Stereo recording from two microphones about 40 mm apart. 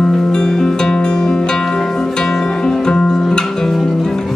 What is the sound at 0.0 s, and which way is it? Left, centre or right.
Music, centre.